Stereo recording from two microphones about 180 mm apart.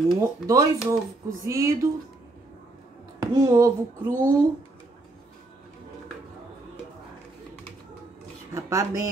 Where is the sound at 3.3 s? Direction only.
20° right (ahead or behind).